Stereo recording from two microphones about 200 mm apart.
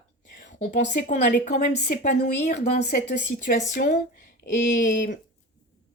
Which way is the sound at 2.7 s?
55° left (ahead or behind).